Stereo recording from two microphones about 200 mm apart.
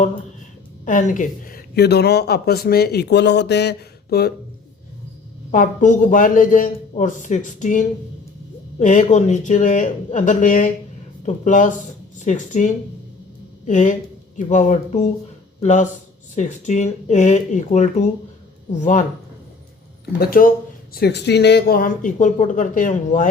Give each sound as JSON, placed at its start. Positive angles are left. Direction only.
{"t": 0.9, "sound": "speech", "side_deg": 40}
{"t": 5.5, "sound": "a man's voice", "side_deg": 40}
{"t": 20.1, "sound": "a man's voice", "side_deg": 45}